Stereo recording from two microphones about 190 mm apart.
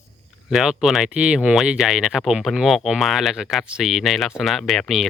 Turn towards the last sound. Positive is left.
turn(degrees=0)  # may be behind; listen again after turning